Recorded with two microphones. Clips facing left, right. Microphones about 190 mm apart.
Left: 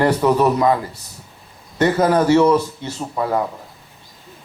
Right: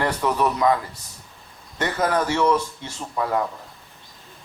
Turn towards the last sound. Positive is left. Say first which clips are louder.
# left 3 dB
turn(degrees=25)  # may be behind; listen again after turning